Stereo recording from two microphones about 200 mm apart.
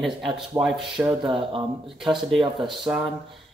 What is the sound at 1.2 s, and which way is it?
Speech, 25° right (ahead or behind).